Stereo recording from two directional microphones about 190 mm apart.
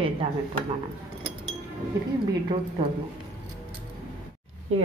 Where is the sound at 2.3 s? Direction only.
25° right (ahead or behind).